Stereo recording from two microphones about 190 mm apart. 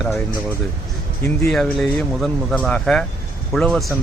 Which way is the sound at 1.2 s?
5° left (ahead or behind).